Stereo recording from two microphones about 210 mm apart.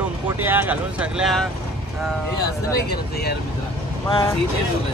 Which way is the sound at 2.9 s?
50° left (ahead or behind).